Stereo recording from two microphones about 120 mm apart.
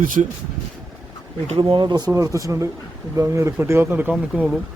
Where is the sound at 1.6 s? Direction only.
40° right (ahead or behind); by 4.4 s 15° right (ahead or behind).